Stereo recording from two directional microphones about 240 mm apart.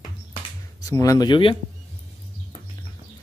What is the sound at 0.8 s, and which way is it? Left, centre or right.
Speech, centre.